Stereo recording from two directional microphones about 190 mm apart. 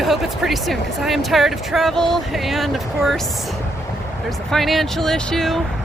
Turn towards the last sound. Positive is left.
turn(degrees=0)  # may be behind; listen again after turning